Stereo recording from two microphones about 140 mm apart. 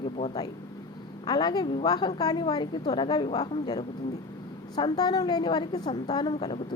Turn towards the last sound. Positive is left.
turn(degrees=35)  # may be behind; listen again after turning